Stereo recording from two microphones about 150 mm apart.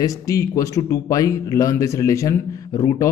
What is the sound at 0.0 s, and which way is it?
A man's voice, 20° left (ahead or behind).